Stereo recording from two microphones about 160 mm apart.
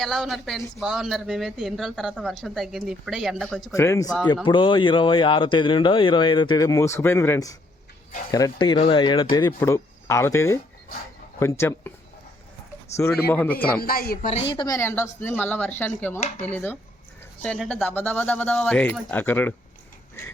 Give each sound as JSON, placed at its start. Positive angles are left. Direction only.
{"t": 0.0, "sound": "speech", "side_deg": 0}
{"t": 3.8, "sound": "speech", "side_deg": 20}
{"t": 4.4, "sound": "speech", "side_deg": 30}
{"t": 9.6, "sound": "speech", "side_deg": 15}
{"t": 13.0, "sound": "speech", "side_deg": 15}
{"t": 13.8, "sound": "a woman's voice", "side_deg": 70}
{"t": 14.5, "sound": "speech", "side_deg": 25}
{"t": 17.4, "sound": "speech", "side_deg": 5}